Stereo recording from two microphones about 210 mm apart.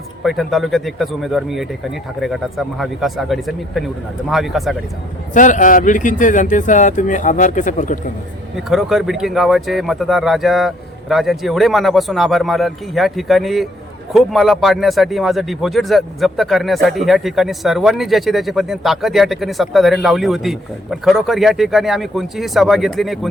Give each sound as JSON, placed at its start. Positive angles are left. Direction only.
{"t": 0.2, "sound": "speech", "side_deg": 0}
{"t": 5.3, "sound": "speech", "side_deg": 35}
{"t": 8.5, "sound": "speech", "side_deg": 0}